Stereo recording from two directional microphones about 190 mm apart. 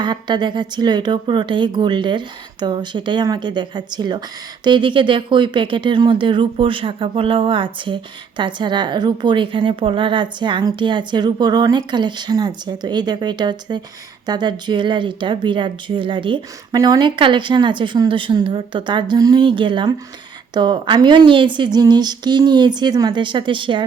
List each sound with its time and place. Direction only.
0.0 s speech: 25° right (ahead or behind)